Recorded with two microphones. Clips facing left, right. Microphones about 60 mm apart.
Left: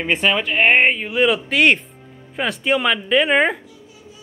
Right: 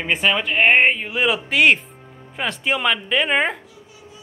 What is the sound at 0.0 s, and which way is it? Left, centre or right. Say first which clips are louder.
Speech: left 1 dB; centre.